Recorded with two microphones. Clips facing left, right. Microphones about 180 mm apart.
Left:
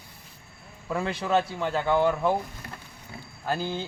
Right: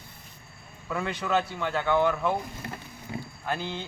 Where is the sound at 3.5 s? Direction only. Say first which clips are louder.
Left 3 dB; 35° left (ahead or behind).